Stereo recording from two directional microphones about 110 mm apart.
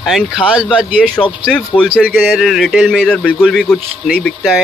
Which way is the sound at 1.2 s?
40° left (ahead or behind).